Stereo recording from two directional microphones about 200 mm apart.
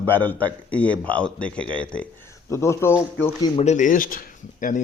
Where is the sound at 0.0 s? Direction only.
10° left (ahead or behind).